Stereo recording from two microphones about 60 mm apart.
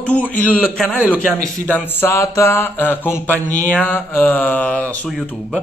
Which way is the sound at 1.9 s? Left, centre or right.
Left.